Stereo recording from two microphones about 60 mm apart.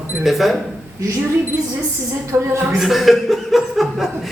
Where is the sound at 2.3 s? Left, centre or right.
Right.